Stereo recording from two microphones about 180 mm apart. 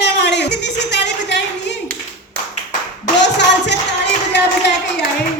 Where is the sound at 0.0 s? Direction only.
70° left (ahead or behind).